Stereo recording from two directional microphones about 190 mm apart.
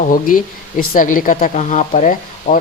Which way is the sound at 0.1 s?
45° left (ahead or behind).